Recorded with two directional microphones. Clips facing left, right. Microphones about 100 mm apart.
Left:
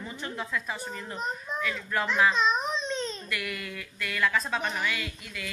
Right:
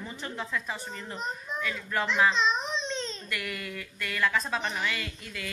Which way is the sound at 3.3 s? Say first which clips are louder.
Left 1 dB; 30° right (ahead or behind).